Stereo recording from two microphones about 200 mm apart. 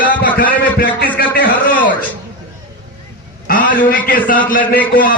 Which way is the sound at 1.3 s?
45° left (ahead or behind).